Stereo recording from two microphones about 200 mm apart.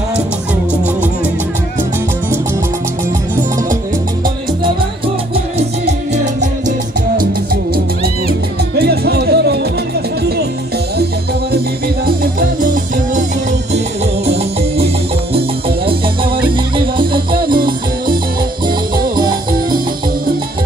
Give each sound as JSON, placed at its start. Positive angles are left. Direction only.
{"t": 7.7, "sound": "music", "side_deg": -50}
{"t": 12.2, "sound": "music", "side_deg": -45}
{"t": 17.0, "sound": "music", "side_deg": -25}